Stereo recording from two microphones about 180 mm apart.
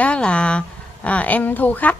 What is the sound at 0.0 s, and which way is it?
Speech, 5° left (ahead or behind).